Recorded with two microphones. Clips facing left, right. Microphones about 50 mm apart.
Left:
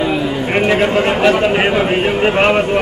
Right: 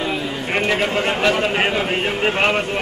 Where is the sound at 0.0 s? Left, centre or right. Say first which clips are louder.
Left 7 dB; centre.